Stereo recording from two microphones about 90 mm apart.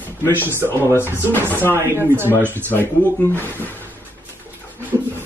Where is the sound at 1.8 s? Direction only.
30° right (ahead or behind).